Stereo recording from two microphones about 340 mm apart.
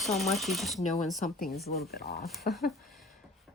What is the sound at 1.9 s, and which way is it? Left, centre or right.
Speech, left.